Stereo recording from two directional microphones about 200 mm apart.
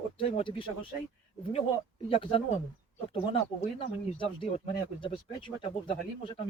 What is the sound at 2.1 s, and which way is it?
Speech, 25° left (ahead or behind).